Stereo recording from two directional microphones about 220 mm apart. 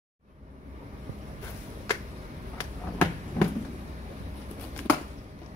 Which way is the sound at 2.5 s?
10° left (ahead or behind).